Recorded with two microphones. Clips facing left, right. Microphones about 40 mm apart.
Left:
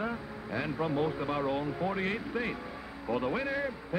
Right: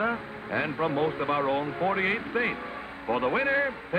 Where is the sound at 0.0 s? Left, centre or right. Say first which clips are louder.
Right 6 dB; right.